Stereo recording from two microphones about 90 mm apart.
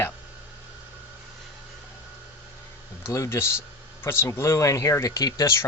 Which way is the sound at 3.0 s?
30° left (ahead or behind).